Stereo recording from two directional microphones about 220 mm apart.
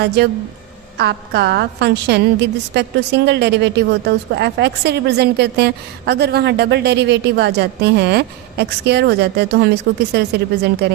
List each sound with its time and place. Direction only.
0.9 s a woman's voice: 50° right (ahead or behind)